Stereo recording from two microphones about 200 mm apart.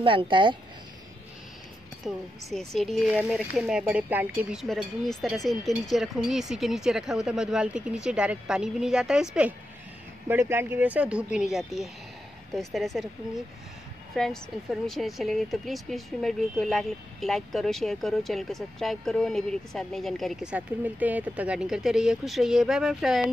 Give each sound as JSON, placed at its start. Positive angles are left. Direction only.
{"t": 0.0, "sound": "speech", "side_deg": -25}
{"t": 2.0, "sound": "speech", "side_deg": 0}
{"t": 14.1, "sound": "speech", "side_deg": 0}